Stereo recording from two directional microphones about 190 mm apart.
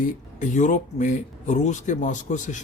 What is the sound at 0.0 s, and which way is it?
Speech, 40° left (ahead or behind).